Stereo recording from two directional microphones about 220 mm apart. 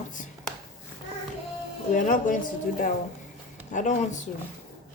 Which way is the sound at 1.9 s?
35° left (ahead or behind).